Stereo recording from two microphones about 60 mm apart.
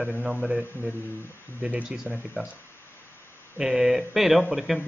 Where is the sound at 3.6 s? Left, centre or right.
Centre.